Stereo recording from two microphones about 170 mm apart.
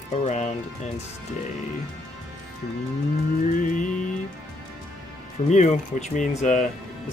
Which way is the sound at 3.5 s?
50° left (ahead or behind).